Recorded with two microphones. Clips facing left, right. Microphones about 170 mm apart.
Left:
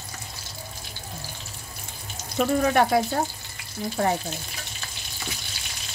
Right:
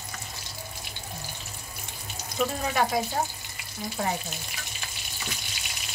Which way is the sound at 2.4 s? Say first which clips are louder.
Left 6 dB; 60° left (ahead or behind).